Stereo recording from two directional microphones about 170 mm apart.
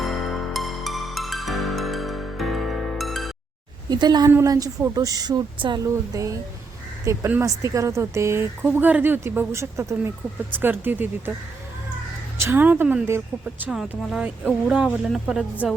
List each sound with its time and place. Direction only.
0.0 s music: centre (ahead or behind)
3.8 s speech: 25° right (ahead or behind)
12.4 s speech: 10° right (ahead or behind)